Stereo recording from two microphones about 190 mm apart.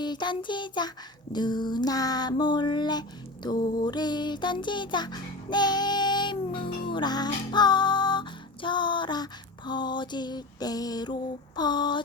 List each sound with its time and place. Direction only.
0.0 s child singing: 25° left (ahead or behind)
3.8 s music: 20° left (ahead or behind)